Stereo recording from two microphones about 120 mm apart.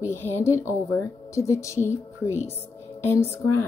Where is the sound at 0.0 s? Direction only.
20° left (ahead or behind).